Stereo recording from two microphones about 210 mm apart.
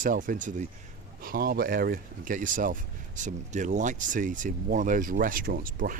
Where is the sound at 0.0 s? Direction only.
40° right (ahead or behind).